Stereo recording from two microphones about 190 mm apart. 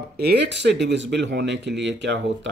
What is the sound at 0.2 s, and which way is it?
Speech, 60° right (ahead or behind).